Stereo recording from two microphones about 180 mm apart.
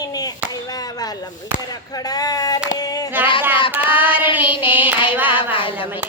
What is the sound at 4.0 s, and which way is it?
Child singing, 10° right (ahead or behind).